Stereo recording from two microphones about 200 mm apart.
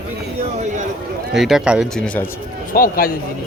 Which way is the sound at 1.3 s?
Centre (ahead or behind).